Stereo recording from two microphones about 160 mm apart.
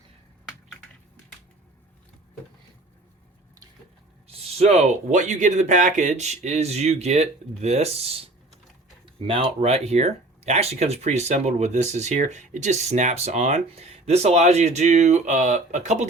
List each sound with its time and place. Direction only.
4.3 s speech: 40° right (ahead or behind)